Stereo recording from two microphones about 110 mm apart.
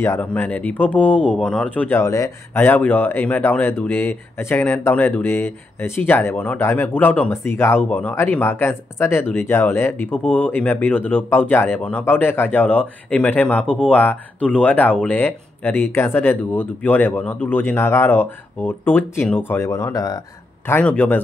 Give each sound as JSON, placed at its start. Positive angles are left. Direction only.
{"t": 0.0, "sound": "speech", "side_deg": 20}
{"t": 2.0, "sound": "speech", "side_deg": 25}
{"t": 20.6, "sound": "speech", "side_deg": 15}